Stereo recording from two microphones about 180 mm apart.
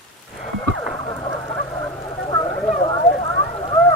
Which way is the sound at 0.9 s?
15° left (ahead or behind).